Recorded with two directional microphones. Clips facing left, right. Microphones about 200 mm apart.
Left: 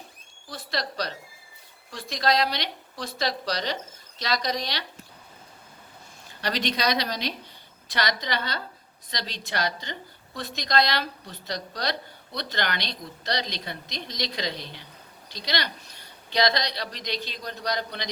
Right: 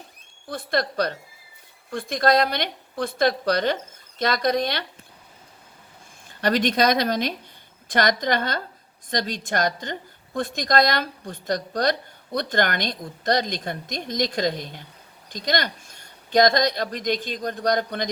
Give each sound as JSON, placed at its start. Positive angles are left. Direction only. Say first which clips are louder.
{"t": 0.4, "sound": "a woman's voice", "louder": "right 7 dB", "side_deg": -55}
{"t": 6.4, "sound": "a woman's voice", "louder": "right 7 dB", "side_deg": -50}